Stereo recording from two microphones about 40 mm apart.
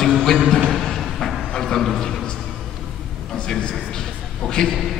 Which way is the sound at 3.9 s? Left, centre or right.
Centre.